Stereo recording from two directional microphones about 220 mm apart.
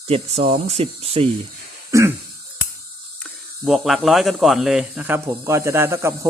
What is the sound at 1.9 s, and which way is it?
Throat clearing, 10° right (ahead or behind).